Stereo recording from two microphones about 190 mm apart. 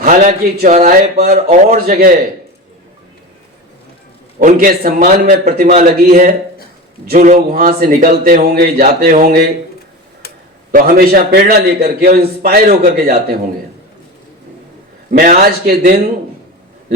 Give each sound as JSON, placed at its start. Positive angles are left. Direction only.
{"t": 0.0, "sound": "speech", "side_deg": -40}
{"t": 1.1, "sound": "a man's voice", "side_deg": -55}
{"t": 1.5, "sound": "speech", "side_deg": -35}
{"t": 1.9, "sound": "a man's voice", "side_deg": -50}
{"t": 4.4, "sound": "a man's voice", "side_deg": -45}
{"t": 10.7, "sound": "a man's voice", "side_deg": -45}
{"t": 15.2, "sound": "a man's voice", "side_deg": -45}